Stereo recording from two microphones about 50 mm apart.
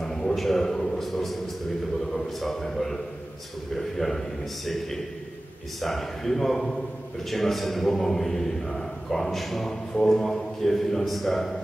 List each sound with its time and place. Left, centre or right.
0.0 s a sound: centre
2.1 s a man's voice: centre
5.8 s speech: centre